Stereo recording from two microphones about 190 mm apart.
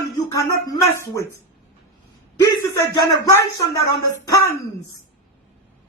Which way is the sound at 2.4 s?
15° left (ahead or behind).